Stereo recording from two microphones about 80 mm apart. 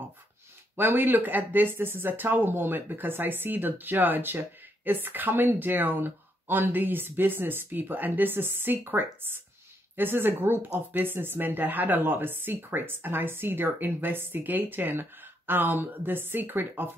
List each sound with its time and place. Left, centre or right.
0.7 s speech: right